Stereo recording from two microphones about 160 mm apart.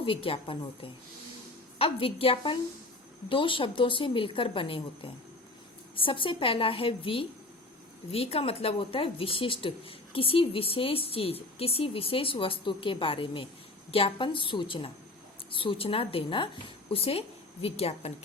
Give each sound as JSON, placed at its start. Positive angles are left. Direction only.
{"t": 0.0, "sound": "speech", "side_deg": 35}